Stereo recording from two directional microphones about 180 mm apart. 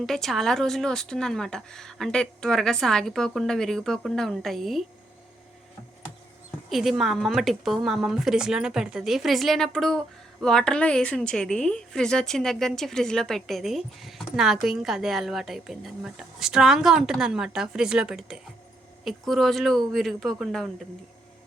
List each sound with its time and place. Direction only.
0.0 s a woman's voice: centre (ahead or behind)
6.7 s a woman's voice: centre (ahead or behind)